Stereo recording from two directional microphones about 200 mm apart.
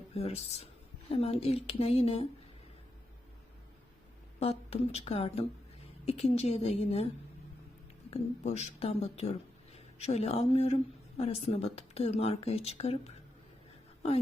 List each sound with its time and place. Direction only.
0.1 s a woman's voice: 30° left (ahead or behind)
4.4 s speech: 30° left (ahead or behind)
8.1 s speech: 30° left (ahead or behind)